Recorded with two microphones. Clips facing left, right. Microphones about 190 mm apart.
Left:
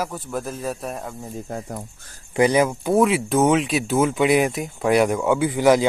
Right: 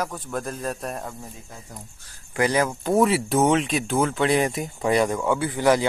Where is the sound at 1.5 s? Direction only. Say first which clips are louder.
Left 13 dB; 55° left (ahead or behind).